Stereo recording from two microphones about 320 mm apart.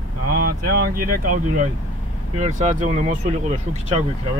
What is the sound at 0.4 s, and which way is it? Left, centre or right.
Speech, right.